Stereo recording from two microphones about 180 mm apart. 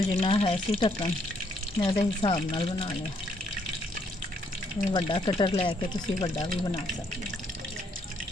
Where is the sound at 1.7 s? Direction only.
30° left (ahead or behind).